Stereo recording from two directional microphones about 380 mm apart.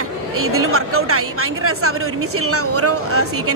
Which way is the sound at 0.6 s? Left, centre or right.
Right.